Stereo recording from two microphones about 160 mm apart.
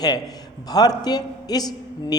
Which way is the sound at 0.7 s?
25° left (ahead or behind).